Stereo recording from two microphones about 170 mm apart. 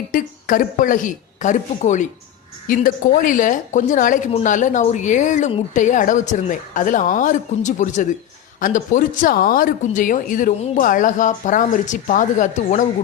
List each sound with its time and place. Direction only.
0.1 s speech: 55° left (ahead or behind)